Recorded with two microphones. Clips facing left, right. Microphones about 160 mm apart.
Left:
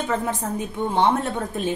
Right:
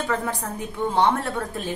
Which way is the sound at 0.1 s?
20° left (ahead or behind).